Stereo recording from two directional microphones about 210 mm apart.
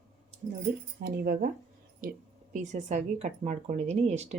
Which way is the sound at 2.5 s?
35° right (ahead or behind).